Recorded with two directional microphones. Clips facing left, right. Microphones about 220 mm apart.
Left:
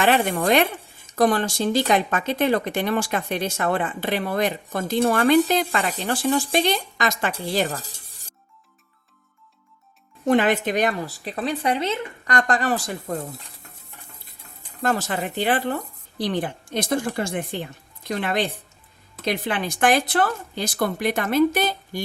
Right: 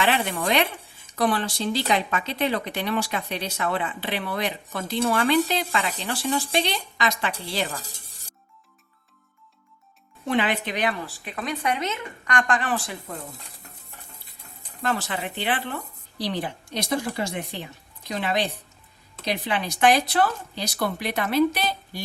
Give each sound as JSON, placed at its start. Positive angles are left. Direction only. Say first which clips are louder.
{"t": 0.0, "sound": "speech", "louder": "left 4 dB", "side_deg": 45}
{"t": 10.2, "sound": "a woman's voice", "louder": "left 6 dB", "side_deg": 45}
{"t": 14.8, "sound": "speech", "louder": "left 4 dB", "side_deg": 45}